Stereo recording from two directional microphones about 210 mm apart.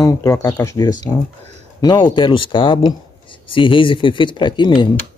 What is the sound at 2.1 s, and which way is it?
Speech, 25° left (ahead or behind).